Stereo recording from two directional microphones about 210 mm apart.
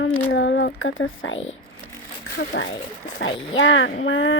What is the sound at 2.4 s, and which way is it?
Speech, 50° left (ahead or behind).